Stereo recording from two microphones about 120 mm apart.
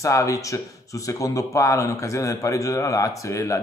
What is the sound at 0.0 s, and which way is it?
Speech, 25° left (ahead or behind).